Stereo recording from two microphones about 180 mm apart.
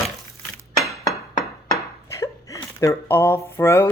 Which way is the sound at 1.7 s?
15° left (ahead or behind).